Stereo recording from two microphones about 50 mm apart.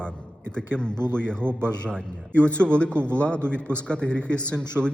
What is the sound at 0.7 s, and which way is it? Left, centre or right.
A man's voice, centre.